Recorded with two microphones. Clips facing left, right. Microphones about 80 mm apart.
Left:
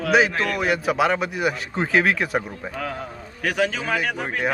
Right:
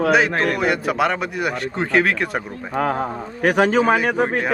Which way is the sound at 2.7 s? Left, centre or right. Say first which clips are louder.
Right 11 dB; right.